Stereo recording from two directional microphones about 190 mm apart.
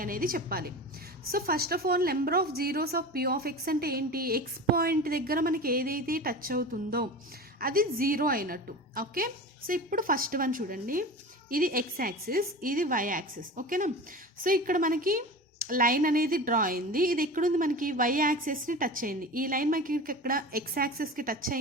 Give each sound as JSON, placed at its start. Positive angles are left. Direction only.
{"t": 0.0, "sound": "a woman's voice", "side_deg": -50}